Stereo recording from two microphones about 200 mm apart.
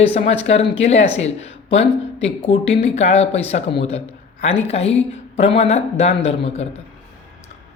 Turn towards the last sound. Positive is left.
turn(degrees=30)  # may be behind; listen again after turning